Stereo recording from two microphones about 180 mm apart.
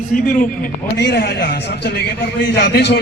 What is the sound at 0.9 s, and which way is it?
A man's voice, 65° left (ahead or behind).